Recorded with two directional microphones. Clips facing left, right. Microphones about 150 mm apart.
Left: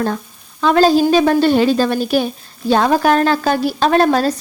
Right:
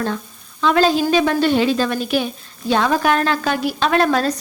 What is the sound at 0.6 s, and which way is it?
A woman's voice, 40° left (ahead or behind).